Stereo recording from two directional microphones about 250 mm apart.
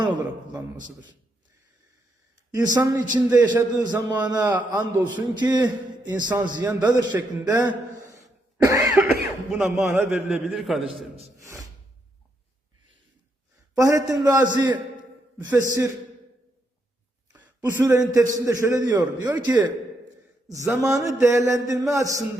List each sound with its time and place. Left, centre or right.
2.5 s a man's voice: centre
8.6 s cough: centre
9.5 s a man's voice: centre
11.3 s gasp: centre
13.7 s a man's voice: centre
17.3 s a sound: centre
18.1 s a man's voice: centre